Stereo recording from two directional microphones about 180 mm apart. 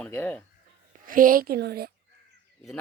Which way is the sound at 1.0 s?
50° right (ahead or behind).